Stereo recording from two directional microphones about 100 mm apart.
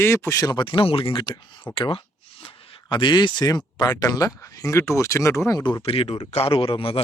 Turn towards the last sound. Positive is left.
turn(degrees=65)  # may be behind; listen again after turning